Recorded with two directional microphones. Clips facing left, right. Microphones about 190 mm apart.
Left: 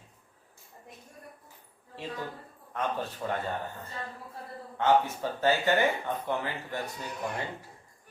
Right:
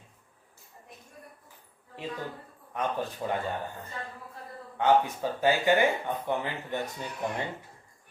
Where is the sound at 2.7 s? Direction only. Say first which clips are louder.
Right 1 dB; 15° right (ahead or behind).